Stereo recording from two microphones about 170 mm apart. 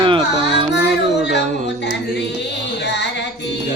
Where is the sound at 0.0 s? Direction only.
30° right (ahead or behind).